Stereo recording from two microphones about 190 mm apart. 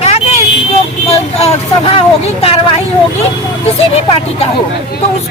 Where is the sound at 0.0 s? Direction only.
35° left (ahead or behind).